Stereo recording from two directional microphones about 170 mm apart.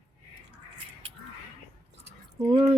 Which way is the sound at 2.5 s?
25° right (ahead or behind).